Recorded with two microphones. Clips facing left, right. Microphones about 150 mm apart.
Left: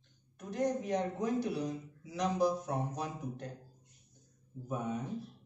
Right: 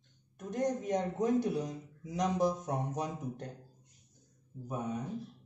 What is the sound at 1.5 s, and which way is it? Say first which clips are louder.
A man's voice: right 1 dB; 20° right (ahead or behind).